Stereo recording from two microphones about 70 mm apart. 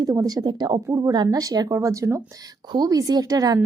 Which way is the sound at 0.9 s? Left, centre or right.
Right.